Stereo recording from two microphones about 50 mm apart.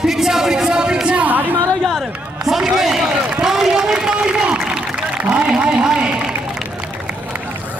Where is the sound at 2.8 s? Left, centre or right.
Centre.